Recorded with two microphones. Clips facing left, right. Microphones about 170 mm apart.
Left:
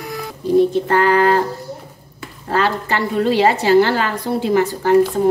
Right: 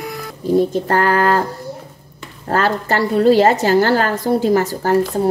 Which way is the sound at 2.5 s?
45° right (ahead or behind).